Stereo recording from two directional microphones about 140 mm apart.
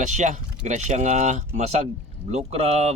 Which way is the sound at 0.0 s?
60° right (ahead or behind).